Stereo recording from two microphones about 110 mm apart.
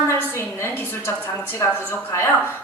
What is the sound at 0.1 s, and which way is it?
A woman's voice, 25° left (ahead or behind).